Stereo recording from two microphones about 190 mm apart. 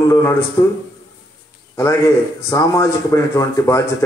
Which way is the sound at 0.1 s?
15° left (ahead or behind).